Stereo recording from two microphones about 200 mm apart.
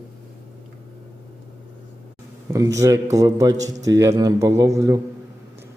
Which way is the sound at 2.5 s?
15° right (ahead or behind).